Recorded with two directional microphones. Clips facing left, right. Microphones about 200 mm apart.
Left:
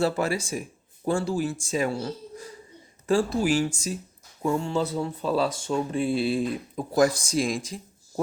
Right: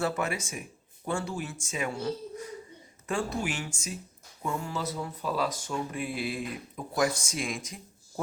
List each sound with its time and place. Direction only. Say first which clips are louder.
0.0 s speech: left 5 dB; 35° left (ahead or behind)